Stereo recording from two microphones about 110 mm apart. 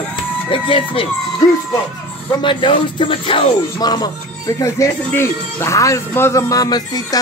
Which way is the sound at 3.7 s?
35° left (ahead or behind).